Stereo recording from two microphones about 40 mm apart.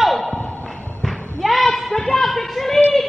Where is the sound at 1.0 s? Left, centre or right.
Centre.